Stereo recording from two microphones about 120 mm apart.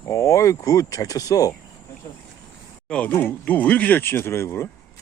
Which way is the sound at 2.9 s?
10° left (ahead or behind).